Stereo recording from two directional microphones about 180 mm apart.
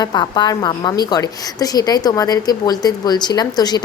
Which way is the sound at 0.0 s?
25° left (ahead or behind).